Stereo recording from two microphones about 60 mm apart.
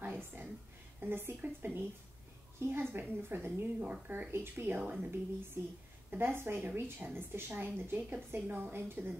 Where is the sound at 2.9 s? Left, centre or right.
Right.